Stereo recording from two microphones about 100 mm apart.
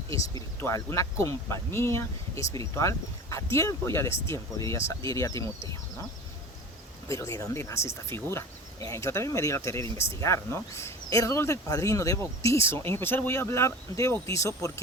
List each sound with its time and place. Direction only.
0.1 s speech: 35° left (ahead or behind)
7.1 s speech: 30° left (ahead or behind)